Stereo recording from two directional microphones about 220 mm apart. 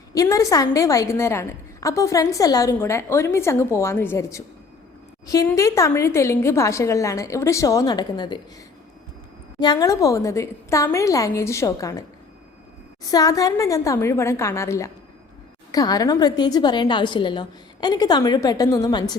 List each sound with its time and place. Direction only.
0.1 s a woman's voice: 15° left (ahead or behind)
9.6 s a woman's voice: 20° left (ahead or behind)